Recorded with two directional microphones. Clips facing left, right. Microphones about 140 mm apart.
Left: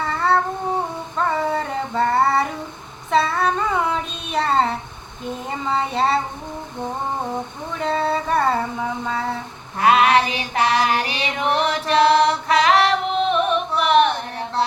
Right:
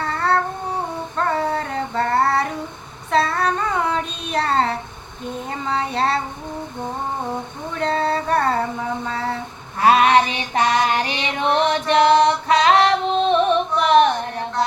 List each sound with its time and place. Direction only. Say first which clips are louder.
0.0 s cat: left 1 dB; centre (ahead or behind)
1.1 s child singing: even; centre (ahead or behind)
5.5 s a sound: left 1 dB; 5° left (ahead or behind)
7.8 s a sound: right 1 dB; centre (ahead or behind)
9.8 s female singing: right 1 dB; 30° right (ahead or behind)
12.1 s music: right 1 dB; 35° right (ahead or behind)